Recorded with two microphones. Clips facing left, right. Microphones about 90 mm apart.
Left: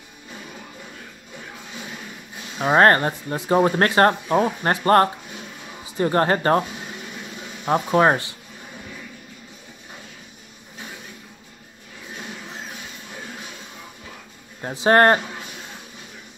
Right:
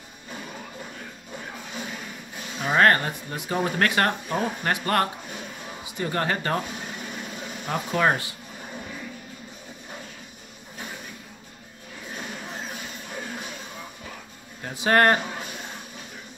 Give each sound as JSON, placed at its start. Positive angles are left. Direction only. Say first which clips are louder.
{"t": 2.6, "sound": "speech", "louder": "left 4 dB", "side_deg": 35}
{"t": 7.6, "sound": "speech", "louder": "left 6 dB", "side_deg": 35}
{"t": 14.6, "sound": "speech", "louder": "left 4 dB", "side_deg": 30}